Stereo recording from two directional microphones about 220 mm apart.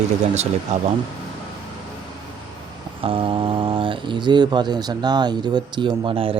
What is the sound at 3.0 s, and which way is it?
Speech, 25° right (ahead or behind).